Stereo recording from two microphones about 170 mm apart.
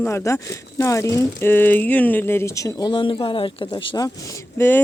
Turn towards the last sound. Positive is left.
turn(degrees=10)  # may be behind; listen again after turning